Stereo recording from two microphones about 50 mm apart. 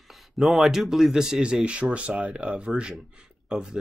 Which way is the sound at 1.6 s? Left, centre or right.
Right.